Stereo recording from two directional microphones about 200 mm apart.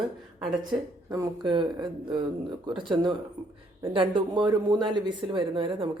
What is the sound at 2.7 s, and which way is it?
Speech, 25° right (ahead or behind).